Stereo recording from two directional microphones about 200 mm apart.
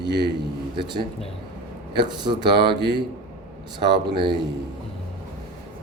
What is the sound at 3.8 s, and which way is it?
Speech, 20° right (ahead or behind).